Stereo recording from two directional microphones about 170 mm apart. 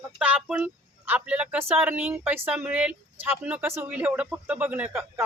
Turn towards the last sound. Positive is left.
turn(degrees=-10)  # may be behind; listen again after turning